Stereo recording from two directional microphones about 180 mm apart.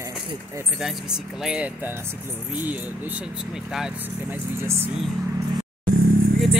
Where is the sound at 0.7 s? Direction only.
Centre (ahead or behind).